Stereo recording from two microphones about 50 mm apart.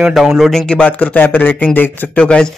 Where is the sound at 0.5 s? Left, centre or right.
Centre; by 2.0 s left.